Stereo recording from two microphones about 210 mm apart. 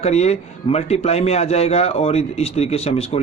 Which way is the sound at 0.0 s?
30° left (ahead or behind).